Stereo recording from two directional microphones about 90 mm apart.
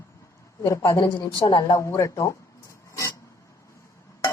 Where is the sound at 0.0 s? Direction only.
30° left (ahead or behind).